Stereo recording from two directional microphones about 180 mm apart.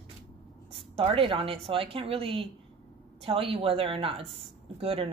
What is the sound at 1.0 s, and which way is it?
Speech, 30° right (ahead or behind).